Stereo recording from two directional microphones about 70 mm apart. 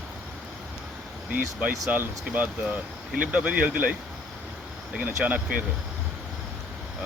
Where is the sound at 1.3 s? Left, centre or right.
Right.